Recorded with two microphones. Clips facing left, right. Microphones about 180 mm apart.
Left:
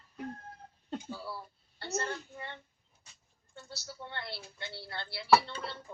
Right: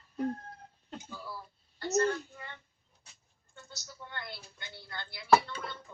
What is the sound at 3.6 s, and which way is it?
Speech, 30° left (ahead or behind).